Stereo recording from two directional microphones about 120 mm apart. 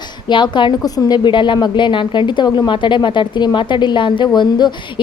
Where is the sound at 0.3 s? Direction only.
40° left (ahead or behind).